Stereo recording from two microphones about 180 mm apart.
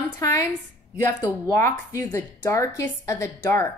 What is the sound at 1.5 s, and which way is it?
Speech, 15° left (ahead or behind).